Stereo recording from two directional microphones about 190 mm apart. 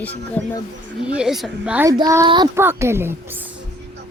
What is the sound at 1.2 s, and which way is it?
Speech, centre (ahead or behind).